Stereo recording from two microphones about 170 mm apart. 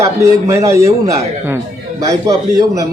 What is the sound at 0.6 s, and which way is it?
Speech, 20° right (ahead or behind).